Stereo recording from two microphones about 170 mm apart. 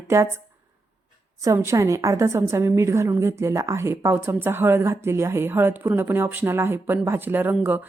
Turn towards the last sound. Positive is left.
turn(degrees=-10)  # may be behind; listen again after turning